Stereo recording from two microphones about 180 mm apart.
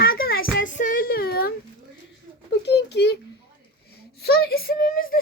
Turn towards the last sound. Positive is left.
turn(degrees=55)  # may be behind; listen again after turning